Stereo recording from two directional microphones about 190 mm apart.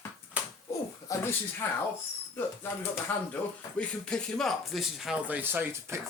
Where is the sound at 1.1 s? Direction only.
15° left (ahead or behind).